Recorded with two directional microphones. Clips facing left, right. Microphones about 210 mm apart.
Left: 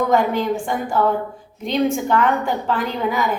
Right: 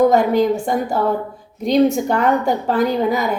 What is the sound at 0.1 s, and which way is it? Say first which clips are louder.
A woman's voice: right 4 dB; 40° right (ahead or behind).